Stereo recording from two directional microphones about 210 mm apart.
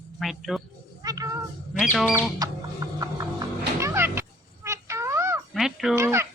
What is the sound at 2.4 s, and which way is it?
Music, 15° right (ahead or behind).